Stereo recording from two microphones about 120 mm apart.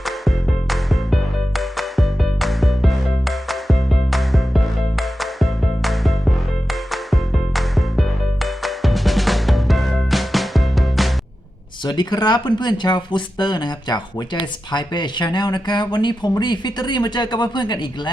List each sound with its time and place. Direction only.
0.0 s music: centre (ahead or behind)
11.9 s speech: 40° left (ahead or behind)